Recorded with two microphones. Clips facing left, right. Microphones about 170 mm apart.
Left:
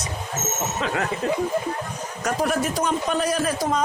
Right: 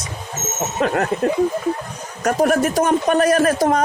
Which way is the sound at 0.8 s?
50° right (ahead or behind).